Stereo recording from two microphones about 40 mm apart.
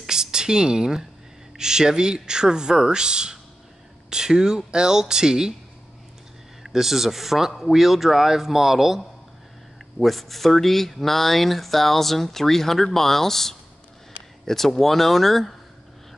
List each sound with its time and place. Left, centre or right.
0.0 s speech: centre
6.6 s speech: centre
9.9 s speech: centre